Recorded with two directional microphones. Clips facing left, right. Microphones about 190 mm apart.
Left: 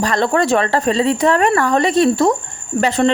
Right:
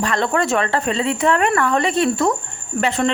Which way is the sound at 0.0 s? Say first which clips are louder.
Left 3 dB; 35° left (ahead or behind).